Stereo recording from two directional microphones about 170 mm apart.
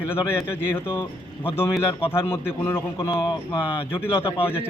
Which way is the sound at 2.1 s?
15° left (ahead or behind).